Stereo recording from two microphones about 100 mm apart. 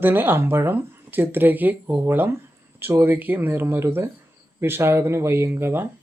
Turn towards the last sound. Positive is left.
turn(degrees=-20)  # may be behind; listen again after turning